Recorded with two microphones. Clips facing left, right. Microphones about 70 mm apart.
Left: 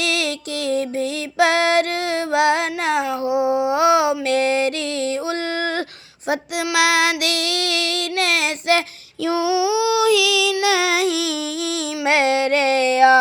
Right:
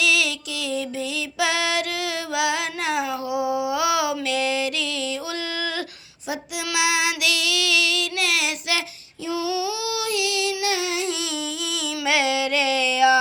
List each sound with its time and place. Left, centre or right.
0.0 s music: left
4.3 s music: left
5.5 s a sound: left
6.2 s child singing: left
9.2 s female singing: left